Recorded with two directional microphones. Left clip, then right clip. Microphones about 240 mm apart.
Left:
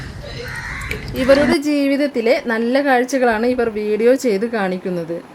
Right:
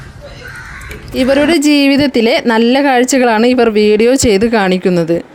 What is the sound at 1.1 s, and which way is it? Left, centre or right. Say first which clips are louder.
A woman's voice: right 3 dB; right.